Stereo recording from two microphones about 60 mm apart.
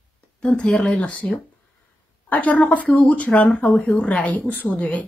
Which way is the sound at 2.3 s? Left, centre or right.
Left.